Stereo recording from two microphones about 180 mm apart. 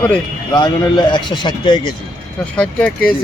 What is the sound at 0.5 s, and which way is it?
A man's voice, 25° left (ahead or behind).